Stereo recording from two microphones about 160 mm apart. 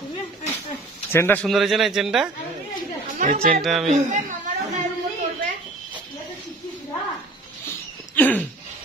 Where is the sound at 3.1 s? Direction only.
55° right (ahead or behind).